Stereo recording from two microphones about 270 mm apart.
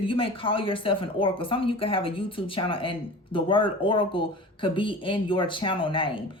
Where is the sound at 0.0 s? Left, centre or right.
Centre.